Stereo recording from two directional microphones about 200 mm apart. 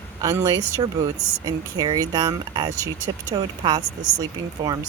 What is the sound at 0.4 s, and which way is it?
Speech, 20° right (ahead or behind).